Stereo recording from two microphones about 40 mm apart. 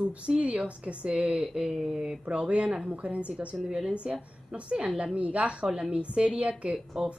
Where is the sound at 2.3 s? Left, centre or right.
Right.